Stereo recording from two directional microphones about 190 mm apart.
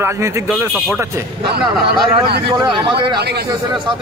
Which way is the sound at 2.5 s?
25° right (ahead or behind).